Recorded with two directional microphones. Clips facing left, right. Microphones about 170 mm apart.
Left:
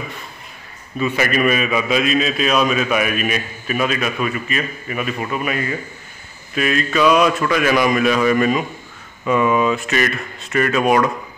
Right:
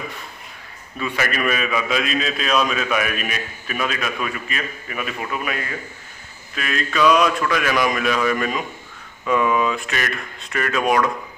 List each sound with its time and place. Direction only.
0.9 s a man's voice: 5° left (ahead or behind)